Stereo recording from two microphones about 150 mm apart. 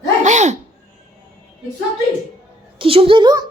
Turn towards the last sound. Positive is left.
turn(degrees=-30)  # may be behind; listen again after turning